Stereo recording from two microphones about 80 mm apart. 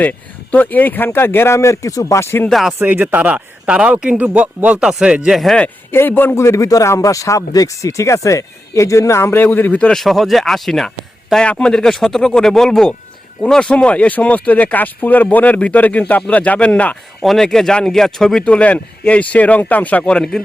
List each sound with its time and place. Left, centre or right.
0.0 s speech: left
2.5 s speech: centre
2.7 s speech: right
5.3 s speech: centre
5.9 s speech: left
6.4 s speech: left; by 9.9 s centre
9.9 s speech: centre
17.2 s speech: centre
18.4 s speech: centre